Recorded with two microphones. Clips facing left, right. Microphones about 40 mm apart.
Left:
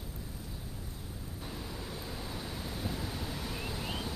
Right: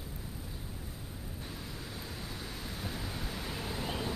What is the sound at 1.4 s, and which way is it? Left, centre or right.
Vehicle, centre.